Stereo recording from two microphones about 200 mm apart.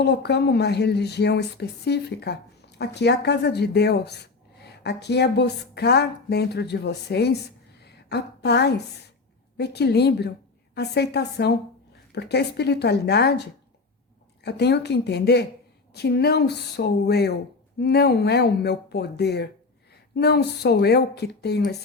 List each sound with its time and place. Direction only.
0.0 s speech: 55° left (ahead or behind)